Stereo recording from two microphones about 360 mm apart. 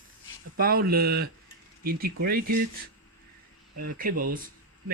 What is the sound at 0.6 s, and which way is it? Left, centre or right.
Speech, right.